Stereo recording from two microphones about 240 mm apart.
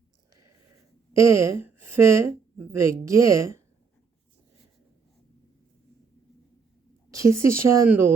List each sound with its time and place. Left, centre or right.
1.1 s a woman's voice: centre
7.1 s speech: centre